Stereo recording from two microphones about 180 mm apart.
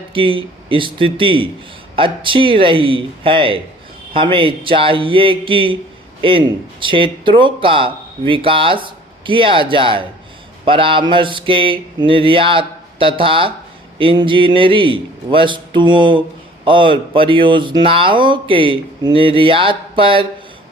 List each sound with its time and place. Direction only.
0.1 s speech: 30° right (ahead or behind)